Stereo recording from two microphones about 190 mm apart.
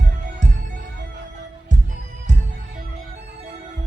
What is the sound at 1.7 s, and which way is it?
Music, 40° right (ahead or behind).